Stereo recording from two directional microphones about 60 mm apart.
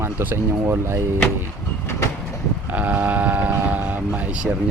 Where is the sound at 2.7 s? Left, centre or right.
Right.